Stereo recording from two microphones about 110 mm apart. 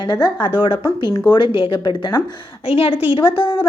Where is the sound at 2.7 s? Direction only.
60° left (ahead or behind).